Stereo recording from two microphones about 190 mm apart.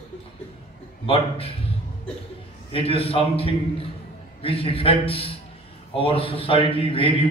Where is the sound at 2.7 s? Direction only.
30° left (ahead or behind).